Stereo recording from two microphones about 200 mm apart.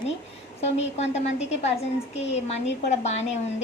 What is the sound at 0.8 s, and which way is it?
A woman's voice, 35° left (ahead or behind).